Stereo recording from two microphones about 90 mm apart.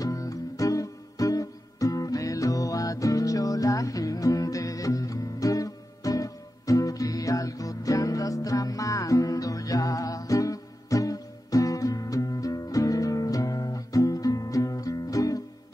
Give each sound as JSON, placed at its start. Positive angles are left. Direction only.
{"t": 0.0, "sound": "music", "side_deg": 40}